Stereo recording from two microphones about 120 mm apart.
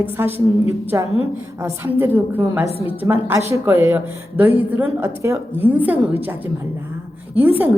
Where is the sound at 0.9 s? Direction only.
20° right (ahead or behind).